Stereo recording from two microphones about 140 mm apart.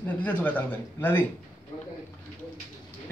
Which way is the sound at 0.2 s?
10° left (ahead or behind).